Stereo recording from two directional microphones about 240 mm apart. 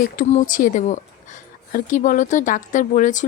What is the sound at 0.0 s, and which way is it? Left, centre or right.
Speech, left.